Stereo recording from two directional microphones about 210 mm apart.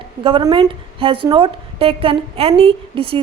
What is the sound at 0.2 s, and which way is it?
A woman's voice, 25° right (ahead or behind).